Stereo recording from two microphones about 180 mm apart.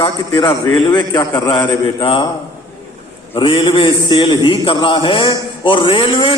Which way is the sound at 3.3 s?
30° left (ahead or behind).